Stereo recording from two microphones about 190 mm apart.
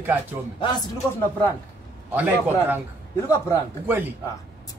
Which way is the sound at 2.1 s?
10° right (ahead or behind).